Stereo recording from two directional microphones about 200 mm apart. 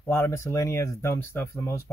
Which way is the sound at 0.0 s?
10° left (ahead or behind).